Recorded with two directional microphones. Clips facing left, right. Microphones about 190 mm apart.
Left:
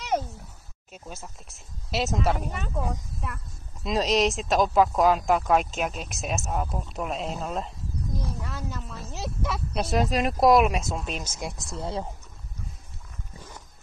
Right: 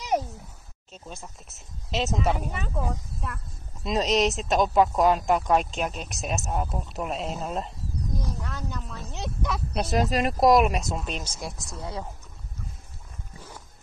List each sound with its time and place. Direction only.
0.9 s speech: 5° left (ahead or behind)
11.3 s speech: 20° left (ahead or behind)